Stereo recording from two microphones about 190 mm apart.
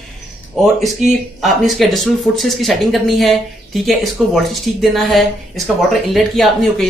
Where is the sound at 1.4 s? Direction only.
Centre (ahead or behind).